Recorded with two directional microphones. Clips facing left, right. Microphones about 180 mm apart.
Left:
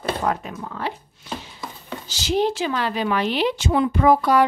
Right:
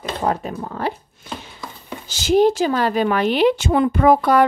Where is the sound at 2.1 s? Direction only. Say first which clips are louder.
Right 7 dB; 50° right (ahead or behind).